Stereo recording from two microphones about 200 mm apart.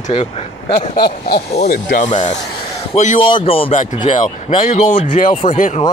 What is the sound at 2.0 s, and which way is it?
Speech, 35° left (ahead or behind).